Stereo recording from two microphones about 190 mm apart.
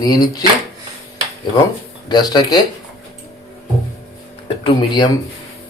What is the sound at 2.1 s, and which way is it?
Speech, 20° left (ahead or behind).